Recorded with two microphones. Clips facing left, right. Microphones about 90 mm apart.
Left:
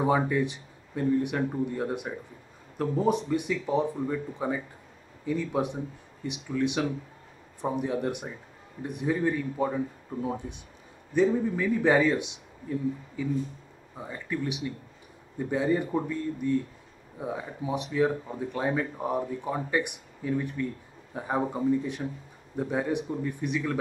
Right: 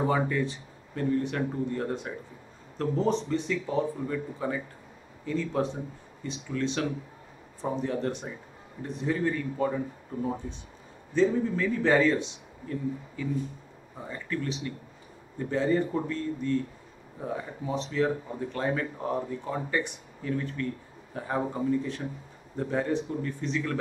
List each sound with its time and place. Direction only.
0.0 s speech: 15° left (ahead or behind)